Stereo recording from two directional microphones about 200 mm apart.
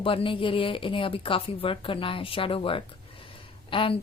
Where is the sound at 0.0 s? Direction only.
25° left (ahead or behind).